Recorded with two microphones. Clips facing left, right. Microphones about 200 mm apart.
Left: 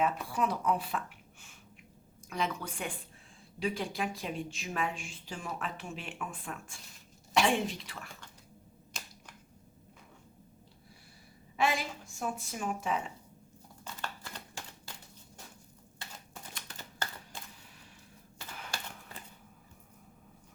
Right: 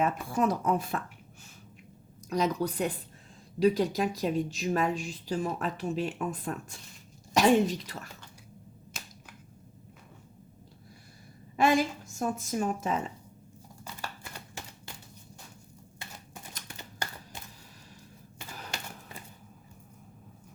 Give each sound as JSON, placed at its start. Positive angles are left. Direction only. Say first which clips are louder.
{"t": 0.0, "sound": "a woman's voice", "louder": "right 4 dB", "side_deg": -45}
{"t": 2.3, "sound": "a woman's voice", "louder": "right 7 dB", "side_deg": -40}
{"t": 8.9, "sound": "finger snapping", "louder": "right 1 dB", "side_deg": -5}
{"t": 11.5, "sound": "a woman's voice", "louder": "right 7 dB", "side_deg": -45}
{"t": 13.8, "sound": "a sound", "louder": "right 1 dB", "side_deg": -10}
{"t": 16.6, "sound": "a sound", "louder": "right 2 dB", "side_deg": -10}
{"t": 18.7, "sound": "typewriter", "louder": "right 1 dB", "side_deg": -20}